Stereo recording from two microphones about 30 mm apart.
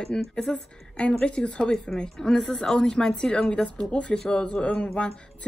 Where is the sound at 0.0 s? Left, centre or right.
Centre.